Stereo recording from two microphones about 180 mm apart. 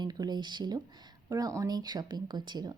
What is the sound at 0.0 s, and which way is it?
A woman's voice, 20° right (ahead or behind).